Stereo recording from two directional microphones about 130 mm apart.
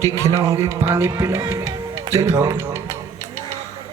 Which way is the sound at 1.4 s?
25° right (ahead or behind).